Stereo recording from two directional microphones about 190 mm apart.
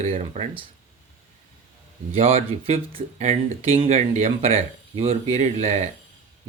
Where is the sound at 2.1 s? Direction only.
30° right (ahead or behind).